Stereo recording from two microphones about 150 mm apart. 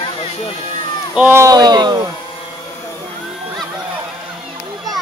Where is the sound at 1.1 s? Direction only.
15° right (ahead or behind).